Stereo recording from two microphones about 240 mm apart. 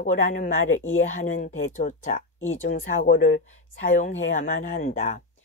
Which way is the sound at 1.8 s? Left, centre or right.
Left.